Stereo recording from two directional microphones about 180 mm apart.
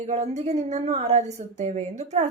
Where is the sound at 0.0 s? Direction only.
40° right (ahead or behind).